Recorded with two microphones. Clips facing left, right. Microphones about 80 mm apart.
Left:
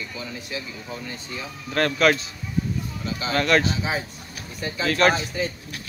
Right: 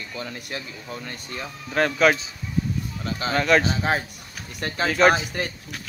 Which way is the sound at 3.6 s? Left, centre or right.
Right.